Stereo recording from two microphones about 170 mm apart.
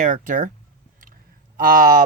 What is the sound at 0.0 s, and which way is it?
Speech, 50° right (ahead or behind).